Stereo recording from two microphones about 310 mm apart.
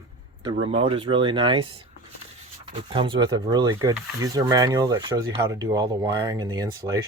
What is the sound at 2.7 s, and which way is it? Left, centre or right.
Speech, centre.